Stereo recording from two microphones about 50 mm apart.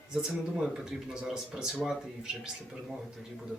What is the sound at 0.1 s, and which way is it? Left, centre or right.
Speech, centre.